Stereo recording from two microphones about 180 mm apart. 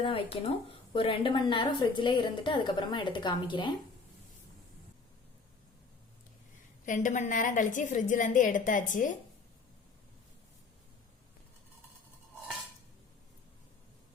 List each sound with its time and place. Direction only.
0.0 s a woman's voice: 30° left (ahead or behind)
6.8 s a woman's voice: 45° left (ahead or behind)